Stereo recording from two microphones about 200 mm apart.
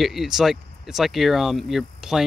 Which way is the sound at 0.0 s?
Centre (ahead or behind).